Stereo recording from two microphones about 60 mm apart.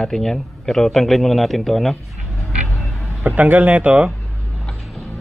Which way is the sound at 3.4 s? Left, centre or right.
Right.